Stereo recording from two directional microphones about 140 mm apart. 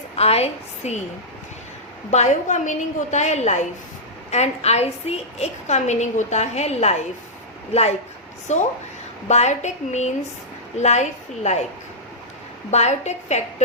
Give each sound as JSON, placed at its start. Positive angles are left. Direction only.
{"t": 0.2, "sound": "a woman's voice", "side_deg": 45}
{"t": 2.0, "sound": "a woman's voice", "side_deg": 55}
{"t": 12.7, "sound": "a woman's voice", "side_deg": 50}